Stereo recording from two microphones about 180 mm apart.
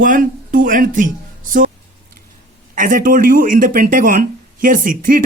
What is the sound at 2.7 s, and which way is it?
Speech, 50° right (ahead or behind).